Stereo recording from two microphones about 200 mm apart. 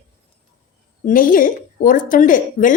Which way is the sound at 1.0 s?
45° left (ahead or behind).